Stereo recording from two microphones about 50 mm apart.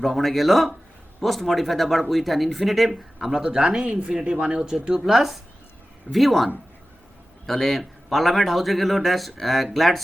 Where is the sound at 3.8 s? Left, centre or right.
Right.